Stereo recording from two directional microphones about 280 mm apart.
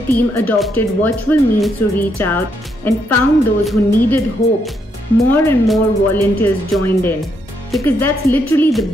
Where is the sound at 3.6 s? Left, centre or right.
Centre.